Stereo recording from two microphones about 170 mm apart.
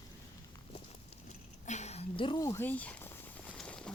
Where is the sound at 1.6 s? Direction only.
40° left (ahead or behind).